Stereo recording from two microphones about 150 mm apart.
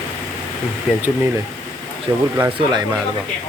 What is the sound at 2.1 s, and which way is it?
Speech, 20° right (ahead or behind).